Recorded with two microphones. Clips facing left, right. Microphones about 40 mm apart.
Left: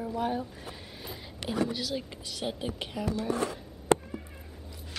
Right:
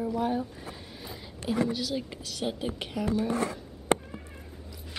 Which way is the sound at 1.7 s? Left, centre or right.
Centre.